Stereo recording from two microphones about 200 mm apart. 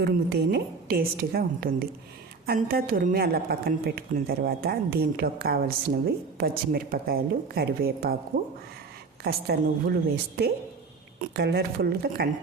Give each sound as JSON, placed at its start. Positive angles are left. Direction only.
{"t": 0.0, "sound": "a woman's voice", "side_deg": -55}
{"t": 11.2, "sound": "a woman's voice", "side_deg": -55}